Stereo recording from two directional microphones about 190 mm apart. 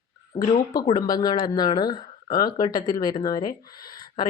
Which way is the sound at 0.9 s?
20° left (ahead or behind).